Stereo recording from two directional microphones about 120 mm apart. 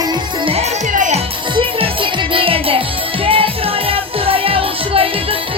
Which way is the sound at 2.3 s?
50° right (ahead or behind).